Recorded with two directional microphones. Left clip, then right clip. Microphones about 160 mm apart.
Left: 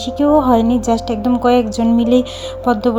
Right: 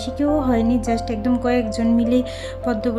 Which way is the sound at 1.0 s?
15° left (ahead or behind).